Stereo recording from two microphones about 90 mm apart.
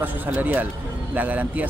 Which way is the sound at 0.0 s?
20° right (ahead or behind).